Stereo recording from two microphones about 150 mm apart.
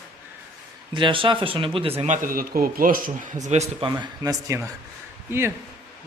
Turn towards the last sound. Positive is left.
turn(degrees=-15)  # may be behind; listen again after turning